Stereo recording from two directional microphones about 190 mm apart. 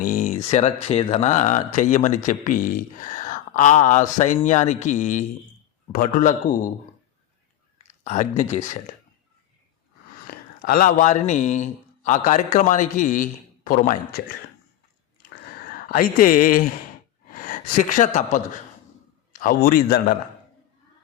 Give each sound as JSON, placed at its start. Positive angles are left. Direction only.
{"t": 0.0, "sound": "a sound", "side_deg": 45}
{"t": 0.5, "sound": "a man's voice", "side_deg": 35}
{"t": 8.0, "sound": "speech", "side_deg": 40}
{"t": 10.2, "sound": "a man's voice", "side_deg": 50}
{"t": 15.9, "sound": "a man's voice", "side_deg": 50}